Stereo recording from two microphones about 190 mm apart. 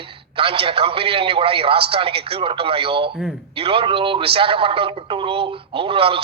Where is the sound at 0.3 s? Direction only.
30° right (ahead or behind).